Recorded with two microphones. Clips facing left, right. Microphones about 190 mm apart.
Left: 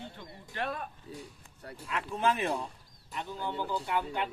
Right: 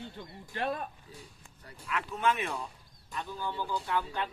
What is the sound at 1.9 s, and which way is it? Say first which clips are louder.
Speech: even; 30° left (ahead or behind).